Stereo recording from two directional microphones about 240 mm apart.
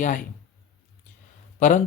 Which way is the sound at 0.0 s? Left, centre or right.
Left.